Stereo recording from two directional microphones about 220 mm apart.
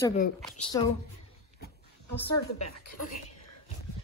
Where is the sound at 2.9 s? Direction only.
40° left (ahead or behind).